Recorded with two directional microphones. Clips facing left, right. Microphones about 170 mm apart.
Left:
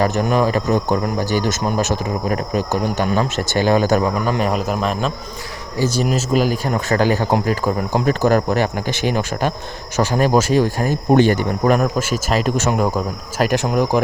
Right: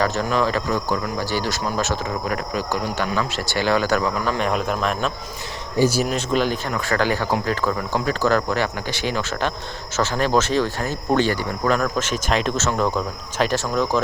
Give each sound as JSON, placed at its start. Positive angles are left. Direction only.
{"t": 0.0, "sound": "speech", "side_deg": 15}
{"t": 3.2, "sound": "speech", "side_deg": 45}
{"t": 3.8, "sound": "speech", "side_deg": 20}
{"t": 4.4, "sound": "speech", "side_deg": 5}
{"t": 6.1, "sound": "speech", "side_deg": 5}
{"t": 6.7, "sound": "speech", "side_deg": 40}
{"t": 7.3, "sound": "speech", "side_deg": 10}
{"t": 10.0, "sound": "speech", "side_deg": 10}